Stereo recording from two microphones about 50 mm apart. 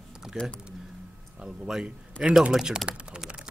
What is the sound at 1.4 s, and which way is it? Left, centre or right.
A man's voice, centre.